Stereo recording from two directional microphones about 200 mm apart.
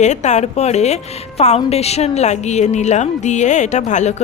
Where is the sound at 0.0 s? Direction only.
35° left (ahead or behind).